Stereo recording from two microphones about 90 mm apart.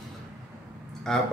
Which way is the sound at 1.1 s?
5° left (ahead or behind).